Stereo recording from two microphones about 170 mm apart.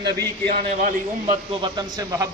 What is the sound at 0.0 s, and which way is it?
Speech, 70° right (ahead or behind).